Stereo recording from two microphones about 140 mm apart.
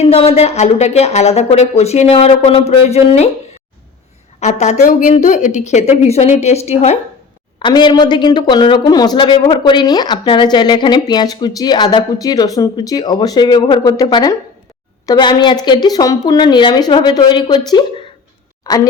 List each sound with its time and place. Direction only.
0.0 s speech: 45° left (ahead or behind)
4.4 s a woman's voice: 55° left (ahead or behind)
7.6 s speech: 35° left (ahead or behind)
18.7 s speech: 25° left (ahead or behind)